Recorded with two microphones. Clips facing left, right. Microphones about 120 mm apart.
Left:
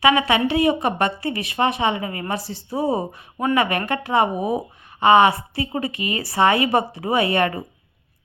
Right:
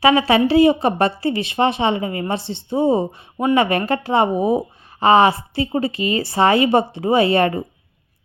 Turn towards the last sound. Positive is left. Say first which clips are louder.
# right 4 dB
turn(degrees=-30)  # may be behind; listen again after turning